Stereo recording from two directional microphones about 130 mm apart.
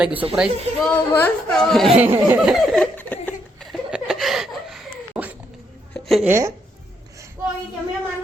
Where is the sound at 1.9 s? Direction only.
15° right (ahead or behind).